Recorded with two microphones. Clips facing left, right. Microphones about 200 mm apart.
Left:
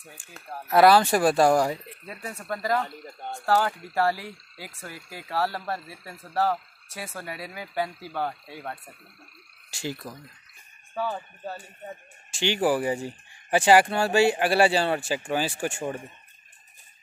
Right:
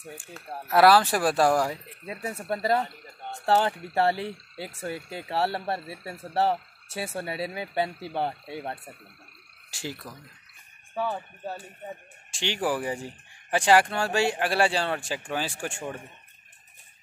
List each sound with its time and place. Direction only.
0.7 s speech: centre (ahead or behind)
2.4 s speech: 25° right (ahead or behind)
9.7 s speech: 5° right (ahead or behind)
12.3 s speech: centre (ahead or behind)